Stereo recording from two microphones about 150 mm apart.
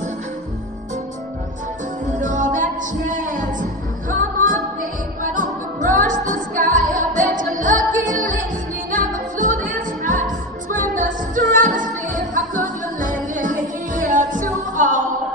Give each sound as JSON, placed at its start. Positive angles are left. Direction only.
{"t": 2.1, "sound": "music", "side_deg": -60}